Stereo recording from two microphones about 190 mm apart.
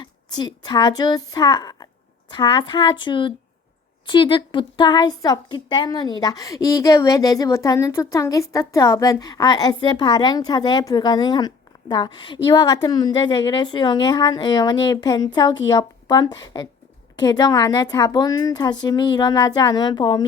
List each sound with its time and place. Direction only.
0.0 s a woman's voice: 25° left (ahead or behind)